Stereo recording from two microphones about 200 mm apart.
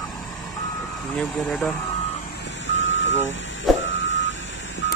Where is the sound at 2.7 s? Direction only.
70° left (ahead or behind).